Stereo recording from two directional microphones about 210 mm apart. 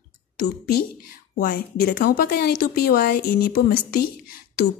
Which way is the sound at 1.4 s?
45° left (ahead or behind).